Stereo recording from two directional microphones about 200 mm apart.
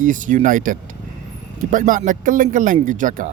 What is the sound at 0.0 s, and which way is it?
A man's voice, 40° right (ahead or behind).